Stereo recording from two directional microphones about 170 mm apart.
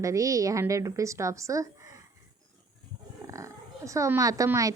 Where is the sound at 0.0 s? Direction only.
20° right (ahead or behind).